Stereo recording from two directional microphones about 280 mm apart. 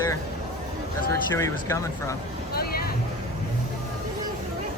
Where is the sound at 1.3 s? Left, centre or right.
Centre.